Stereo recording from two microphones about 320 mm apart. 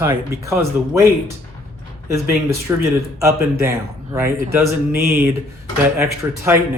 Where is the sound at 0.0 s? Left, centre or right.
Centre.